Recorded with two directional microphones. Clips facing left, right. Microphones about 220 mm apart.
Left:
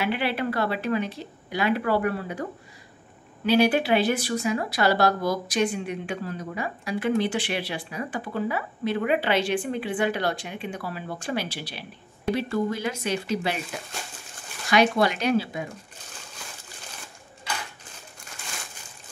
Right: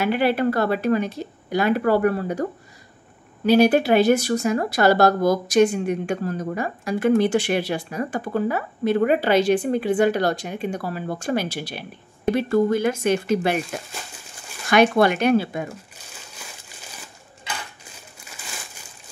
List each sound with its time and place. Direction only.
0.0 s speech: 45° right (ahead or behind)
3.4 s speech: 45° right (ahead or behind)
14.7 s speech: 55° right (ahead or behind)